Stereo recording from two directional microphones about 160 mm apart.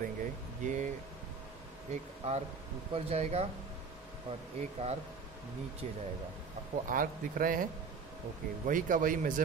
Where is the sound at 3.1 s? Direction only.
40° right (ahead or behind).